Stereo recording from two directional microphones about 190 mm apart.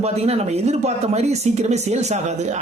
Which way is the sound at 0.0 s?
35° right (ahead or behind).